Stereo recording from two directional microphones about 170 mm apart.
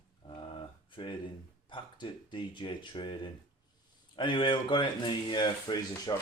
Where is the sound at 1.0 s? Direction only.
25° left (ahead or behind).